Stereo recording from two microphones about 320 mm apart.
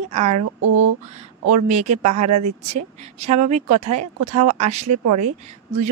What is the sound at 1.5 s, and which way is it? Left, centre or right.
Speech, right.